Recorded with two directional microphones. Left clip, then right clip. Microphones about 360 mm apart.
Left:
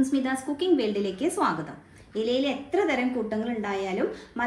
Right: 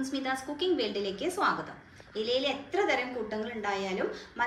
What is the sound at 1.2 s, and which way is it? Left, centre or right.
Speech, centre.